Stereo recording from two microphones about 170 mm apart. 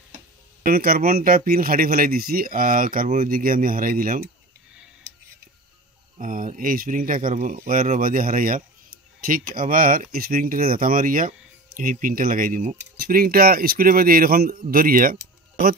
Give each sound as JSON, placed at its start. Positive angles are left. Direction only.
{"t": 0.7, "sound": "speech", "side_deg": -60}
{"t": 6.1, "sound": "speech", "side_deg": -50}